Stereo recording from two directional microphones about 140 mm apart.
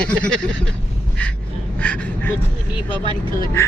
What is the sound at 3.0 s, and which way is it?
Speech, 35° right (ahead or behind).